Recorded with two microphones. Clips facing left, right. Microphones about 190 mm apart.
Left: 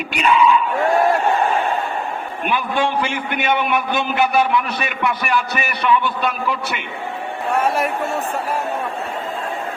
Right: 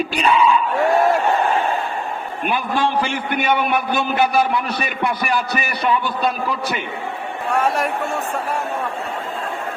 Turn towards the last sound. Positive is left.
turn(degrees=0)  # may be behind; listen again after turning